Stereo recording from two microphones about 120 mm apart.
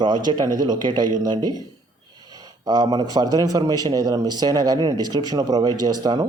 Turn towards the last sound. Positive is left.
turn(degrees=-35)  # may be behind; listen again after turning